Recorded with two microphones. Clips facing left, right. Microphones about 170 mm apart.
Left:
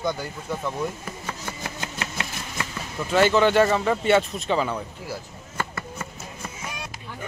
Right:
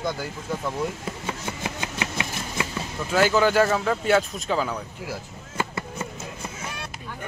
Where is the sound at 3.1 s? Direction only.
5° right (ahead or behind).